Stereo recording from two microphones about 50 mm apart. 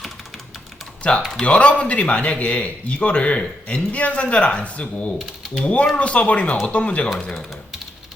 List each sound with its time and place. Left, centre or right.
1.1 s a man's voice: left